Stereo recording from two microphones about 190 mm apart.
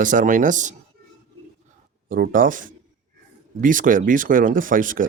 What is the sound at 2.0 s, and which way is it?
Speech, 50° right (ahead or behind).